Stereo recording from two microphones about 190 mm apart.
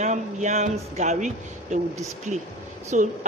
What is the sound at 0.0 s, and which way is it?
Speech, 40° right (ahead or behind).